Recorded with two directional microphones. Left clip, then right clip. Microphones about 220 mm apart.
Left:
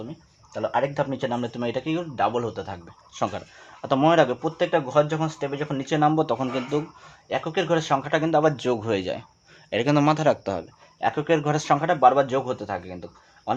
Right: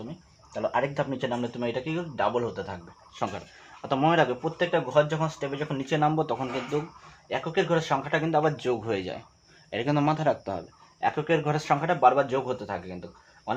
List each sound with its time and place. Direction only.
0.5 s speech: 35° left (ahead or behind)